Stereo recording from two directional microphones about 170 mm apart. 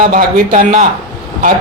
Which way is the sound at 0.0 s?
55° right (ahead or behind).